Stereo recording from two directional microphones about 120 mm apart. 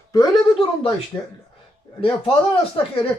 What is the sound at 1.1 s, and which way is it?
Speech, 25° left (ahead or behind).